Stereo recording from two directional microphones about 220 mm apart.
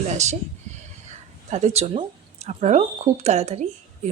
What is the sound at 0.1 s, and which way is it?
Speech, 30° right (ahead or behind).